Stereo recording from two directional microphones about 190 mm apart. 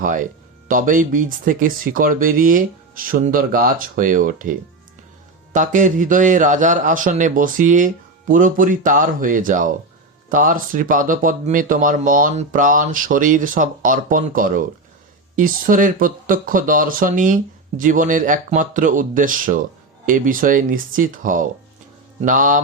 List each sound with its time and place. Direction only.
0.0 s speech: 45° right (ahead or behind)
5.5 s speech: 40° right (ahead or behind)